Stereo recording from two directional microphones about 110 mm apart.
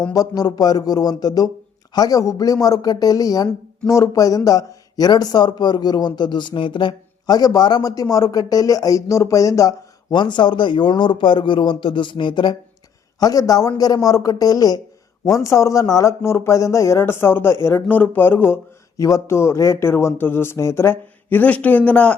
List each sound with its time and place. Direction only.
0.1 s speech: 35° left (ahead or behind)
10.1 s speech: 45° left (ahead or behind)
13.1 s speech: 35° left (ahead or behind)
18.9 s speech: 30° left (ahead or behind); by 22.1 s 15° left (ahead or behind)